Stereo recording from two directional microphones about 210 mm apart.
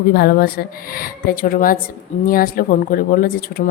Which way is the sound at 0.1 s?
45° left (ahead or behind).